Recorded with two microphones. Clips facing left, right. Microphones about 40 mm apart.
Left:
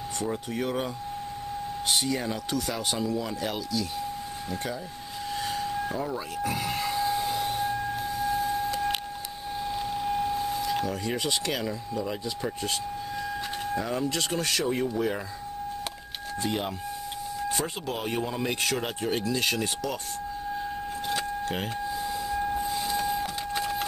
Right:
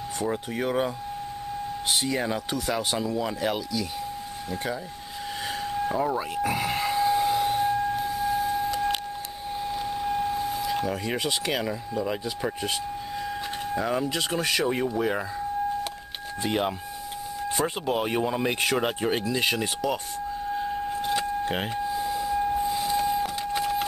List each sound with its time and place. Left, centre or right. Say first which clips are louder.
0.3 s speech: right 3 dB; centre
2.0 s speech: right 2 dB; centre
5.6 s a sound: right 3 dB; centre
6.0 s speech: right 4 dB; right
6.5 s a sound: right 3 dB; centre
9.7 s speech: right 1 dB; centre
16.4 s speech: right 4 dB; centre
21.0 s keys jangling: right 3 dB; centre
21.9 s a sound: right 4 dB; centre